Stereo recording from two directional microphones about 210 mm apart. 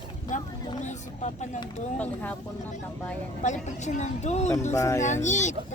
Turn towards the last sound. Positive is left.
turn(degrees=35)  # may be behind; listen again after turning